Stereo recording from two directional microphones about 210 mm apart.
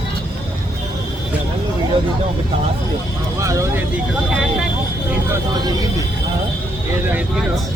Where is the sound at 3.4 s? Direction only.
15° right (ahead or behind).